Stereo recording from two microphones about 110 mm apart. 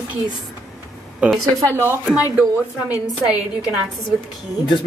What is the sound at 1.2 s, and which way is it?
Speech, 10° right (ahead or behind).